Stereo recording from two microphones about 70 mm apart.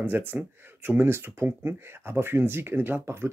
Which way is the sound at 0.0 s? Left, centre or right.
Right.